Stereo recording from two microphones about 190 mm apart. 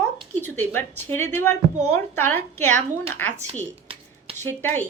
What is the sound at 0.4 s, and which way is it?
Speech, 10° left (ahead or behind).